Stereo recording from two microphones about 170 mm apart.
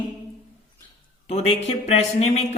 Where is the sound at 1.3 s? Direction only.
35° left (ahead or behind).